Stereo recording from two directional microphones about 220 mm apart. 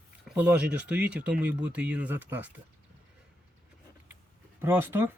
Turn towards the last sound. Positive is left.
turn(degrees=-10)  # may be behind; listen again after turning